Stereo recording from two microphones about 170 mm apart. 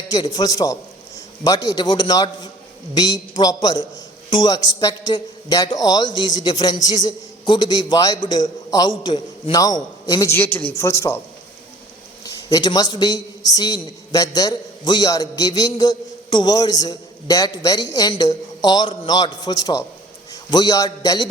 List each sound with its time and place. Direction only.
0.1 s a man's voice: 25° left (ahead or behind)
12.2 s a man's voice: 20° left (ahead or behind)